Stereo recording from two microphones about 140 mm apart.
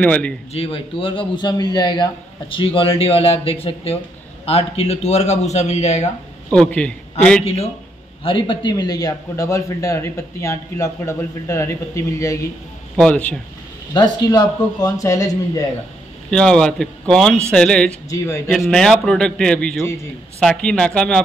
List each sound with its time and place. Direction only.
0.0 s a man's voice: 10° left (ahead or behind)
0.5 s a man's voice: 45° left (ahead or behind)
6.5 s a man's voice: 10° left (ahead or behind)
8.2 s speech: 35° left (ahead or behind); by 12.4 s 20° left (ahead or behind)
12.9 s a man's voice: 5° left (ahead or behind)
13.9 s speech: 30° left (ahead or behind)
16.3 s speech: 5° left (ahead or behind)